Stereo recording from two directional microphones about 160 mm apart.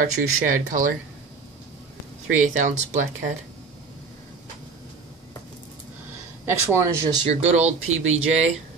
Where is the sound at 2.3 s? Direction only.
50° right (ahead or behind).